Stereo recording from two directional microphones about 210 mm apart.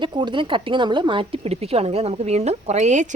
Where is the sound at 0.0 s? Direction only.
20° right (ahead or behind).